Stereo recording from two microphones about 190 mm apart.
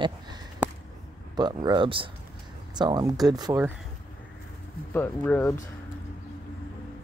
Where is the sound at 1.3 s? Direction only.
20° right (ahead or behind).